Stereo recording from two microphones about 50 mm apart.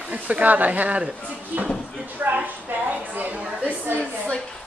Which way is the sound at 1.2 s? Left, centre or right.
Left.